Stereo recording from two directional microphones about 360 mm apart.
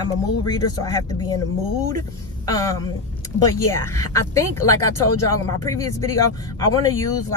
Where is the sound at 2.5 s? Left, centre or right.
Centre.